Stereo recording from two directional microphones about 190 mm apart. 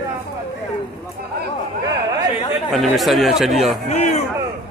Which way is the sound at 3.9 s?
35° left (ahead or behind).